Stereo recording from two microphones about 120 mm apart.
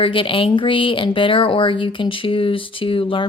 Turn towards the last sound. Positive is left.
turn(degrees=45)  # may be behind; listen again after turning